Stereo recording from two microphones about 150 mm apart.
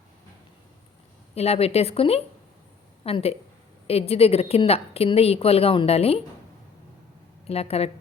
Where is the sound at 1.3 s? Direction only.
45° left (ahead or behind).